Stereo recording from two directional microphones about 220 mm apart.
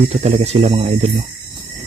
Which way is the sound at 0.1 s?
30° right (ahead or behind).